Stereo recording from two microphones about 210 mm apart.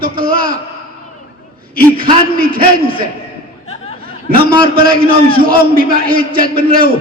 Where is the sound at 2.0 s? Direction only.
45° right (ahead or behind).